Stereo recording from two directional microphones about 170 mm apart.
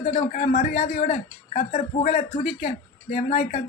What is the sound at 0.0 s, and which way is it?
A man's voice, 40° left (ahead or behind).